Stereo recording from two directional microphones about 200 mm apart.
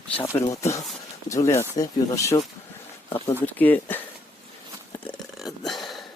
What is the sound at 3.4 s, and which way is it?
Speech, 10° left (ahead or behind).